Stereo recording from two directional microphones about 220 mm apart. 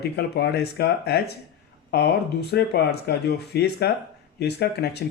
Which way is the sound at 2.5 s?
50° left (ahead or behind).